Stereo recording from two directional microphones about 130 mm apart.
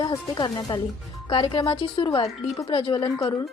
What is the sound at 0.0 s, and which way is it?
A woman's voice, 30° left (ahead or behind).